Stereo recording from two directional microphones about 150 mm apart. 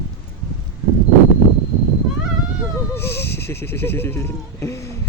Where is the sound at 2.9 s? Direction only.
15° left (ahead or behind).